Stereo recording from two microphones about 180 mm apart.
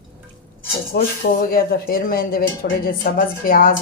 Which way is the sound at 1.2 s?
55° left (ahead or behind).